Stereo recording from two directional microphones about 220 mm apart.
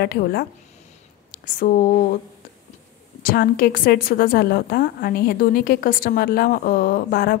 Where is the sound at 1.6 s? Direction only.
35° left (ahead or behind).